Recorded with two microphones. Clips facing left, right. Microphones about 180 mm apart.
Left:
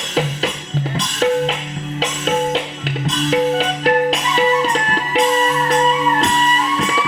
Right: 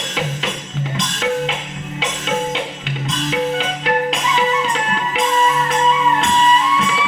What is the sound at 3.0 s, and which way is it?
Music, 35° left (ahead or behind).